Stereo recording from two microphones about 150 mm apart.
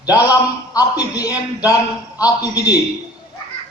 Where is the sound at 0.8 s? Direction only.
25° left (ahead or behind).